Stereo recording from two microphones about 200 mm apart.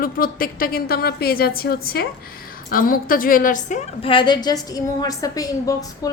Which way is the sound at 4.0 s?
25° left (ahead or behind).